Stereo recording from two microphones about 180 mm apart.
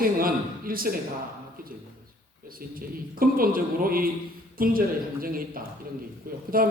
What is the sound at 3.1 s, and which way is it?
A man's voice, 50° right (ahead or behind).